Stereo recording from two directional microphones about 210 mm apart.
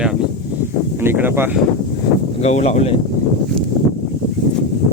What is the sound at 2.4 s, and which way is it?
Speech, 30° left (ahead or behind).